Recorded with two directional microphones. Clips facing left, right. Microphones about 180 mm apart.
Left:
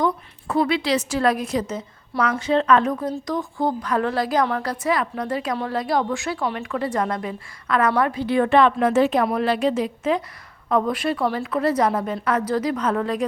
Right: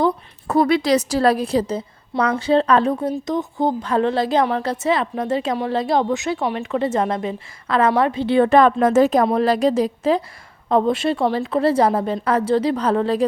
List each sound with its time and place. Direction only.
0.0 s a woman's voice: 40° right (ahead or behind)
8.4 s a woman's voice: 45° right (ahead or behind)